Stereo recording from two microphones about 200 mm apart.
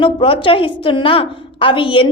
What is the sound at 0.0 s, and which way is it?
A woman's voice, 25° left (ahead or behind).